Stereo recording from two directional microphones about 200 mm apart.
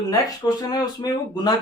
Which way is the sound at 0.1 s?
20° left (ahead or behind).